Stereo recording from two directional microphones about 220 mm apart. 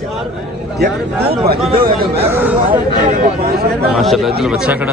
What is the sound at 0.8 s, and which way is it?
Speech, 50° right (ahead or behind).